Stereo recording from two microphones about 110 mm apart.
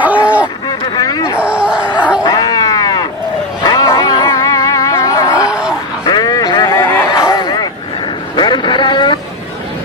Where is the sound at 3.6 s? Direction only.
35° left (ahead or behind).